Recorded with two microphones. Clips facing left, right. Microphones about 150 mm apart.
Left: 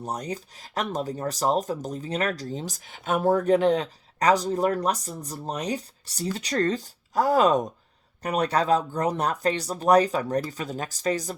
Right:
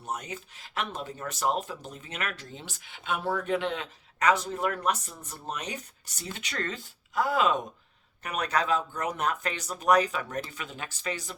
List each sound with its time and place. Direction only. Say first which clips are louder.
0.0 s speech: left 5 dB; 35° left (ahead or behind)